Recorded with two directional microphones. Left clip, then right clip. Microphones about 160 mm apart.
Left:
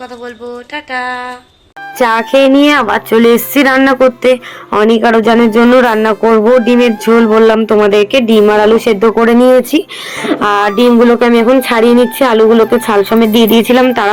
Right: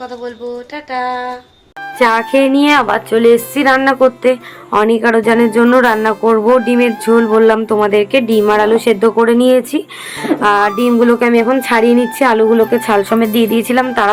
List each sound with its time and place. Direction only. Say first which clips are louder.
0.9 s speech: even; centre (ahead or behind)
2.0 s speech: left 1 dB; 30° left (ahead or behind)
2.5 s speech: left 3 dB; 15° left (ahead or behind); by 4.4 s 40° left (ahead or behind)
4.7 s a man's voice: left 3 dB; 15° left (ahead or behind)
9.1 s a man's voice: left 3 dB; 35° left (ahead or behind); by 12.5 s 10° left (ahead or behind)
12.5 s speech: left 3 dB; centre (ahead or behind)
13.3 s speech: left 5 dB; 20° left (ahead or behind)